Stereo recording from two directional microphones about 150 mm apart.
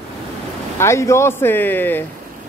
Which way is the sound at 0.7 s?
20° left (ahead or behind).